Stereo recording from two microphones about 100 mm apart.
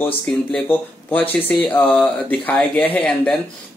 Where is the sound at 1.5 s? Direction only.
15° left (ahead or behind).